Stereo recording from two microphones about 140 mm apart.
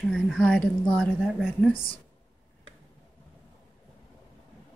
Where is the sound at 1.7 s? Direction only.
40° left (ahead or behind).